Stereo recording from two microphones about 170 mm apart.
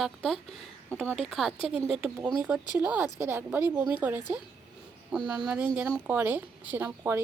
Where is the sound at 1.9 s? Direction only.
Centre (ahead or behind).